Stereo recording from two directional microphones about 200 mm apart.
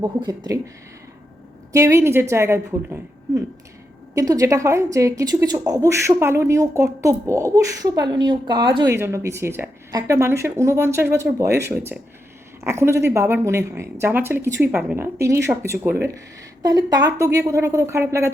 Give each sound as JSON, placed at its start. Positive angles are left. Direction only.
{"t": 0.0, "sound": "speech", "side_deg": -20}
{"t": 1.7, "sound": "a woman's voice", "side_deg": -15}